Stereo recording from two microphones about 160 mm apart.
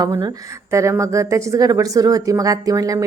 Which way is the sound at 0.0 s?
25° right (ahead or behind).